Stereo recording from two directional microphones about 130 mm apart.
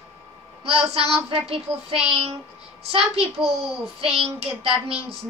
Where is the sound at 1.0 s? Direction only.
50° right (ahead or behind).